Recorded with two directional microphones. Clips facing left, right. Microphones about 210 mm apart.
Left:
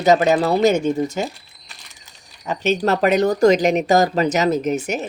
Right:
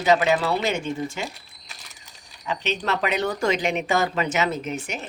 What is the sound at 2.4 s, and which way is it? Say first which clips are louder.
Speech: left 8 dB; 45° left (ahead or behind).